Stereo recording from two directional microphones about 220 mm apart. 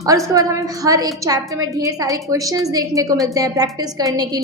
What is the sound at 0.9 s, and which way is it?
A woman's voice, 15° right (ahead or behind).